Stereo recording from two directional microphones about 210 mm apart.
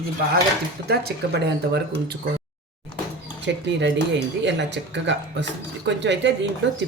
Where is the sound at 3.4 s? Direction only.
55° right (ahead or behind).